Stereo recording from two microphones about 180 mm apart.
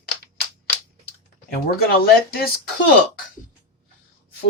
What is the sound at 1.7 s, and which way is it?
Speech, 55° left (ahead or behind).